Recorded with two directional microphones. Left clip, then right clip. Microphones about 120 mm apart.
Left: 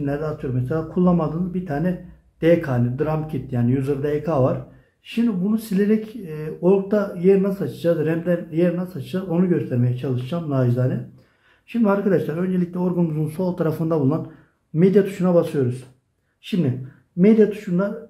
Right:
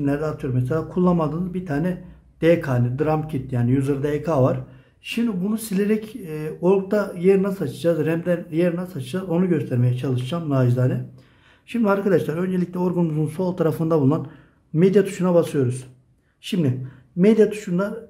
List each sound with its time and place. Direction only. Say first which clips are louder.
0.0 s a man's voice: right 1 dB; 35° right (ahead or behind)
5.0 s a man's voice: left 1 dB; 40° right (ahead or behind)